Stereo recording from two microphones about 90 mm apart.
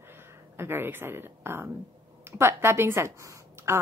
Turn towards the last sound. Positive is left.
turn(degrees=-35)  # may be behind; listen again after turning